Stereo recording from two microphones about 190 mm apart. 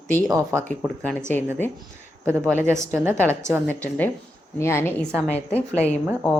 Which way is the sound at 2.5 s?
10° right (ahead or behind).